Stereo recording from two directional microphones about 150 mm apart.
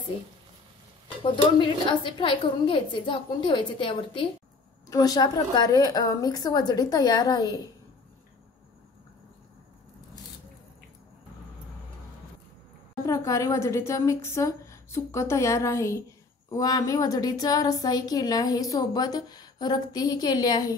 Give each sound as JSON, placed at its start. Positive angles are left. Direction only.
{"t": 1.3, "sound": "a woman's voice", "side_deg": 30}
{"t": 13.0, "sound": "a woman's voice", "side_deg": 20}